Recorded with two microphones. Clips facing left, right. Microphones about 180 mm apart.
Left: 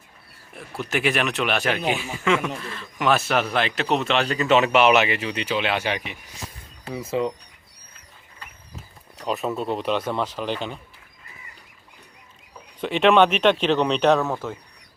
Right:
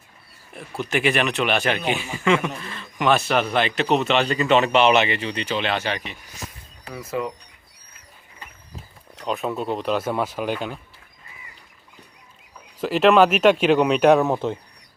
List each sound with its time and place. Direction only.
0.5 s speech: centre (ahead or behind)
6.9 s speech: 25° left (ahead or behind)
9.2 s speech: centre (ahead or behind)
12.8 s speech: 5° right (ahead or behind); by 14.6 s 20° right (ahead or behind)